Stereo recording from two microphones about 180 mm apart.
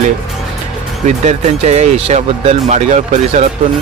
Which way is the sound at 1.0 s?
40° right (ahead or behind).